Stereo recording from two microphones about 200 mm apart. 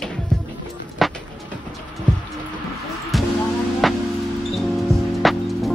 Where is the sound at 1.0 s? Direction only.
Centre (ahead or behind).